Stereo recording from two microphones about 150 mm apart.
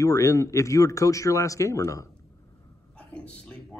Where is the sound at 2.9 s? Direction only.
5° left (ahead or behind).